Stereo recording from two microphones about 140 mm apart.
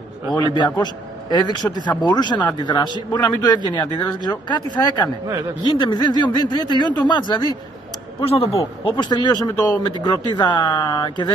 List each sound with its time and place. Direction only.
0.4 s a man's voice: 30° left (ahead or behind)
8.2 s a man's voice: 40° left (ahead or behind)